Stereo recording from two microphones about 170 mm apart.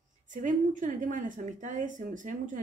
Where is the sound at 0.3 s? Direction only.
50° right (ahead or behind).